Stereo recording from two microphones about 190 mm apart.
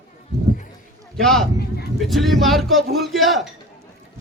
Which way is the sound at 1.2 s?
Centre (ahead or behind).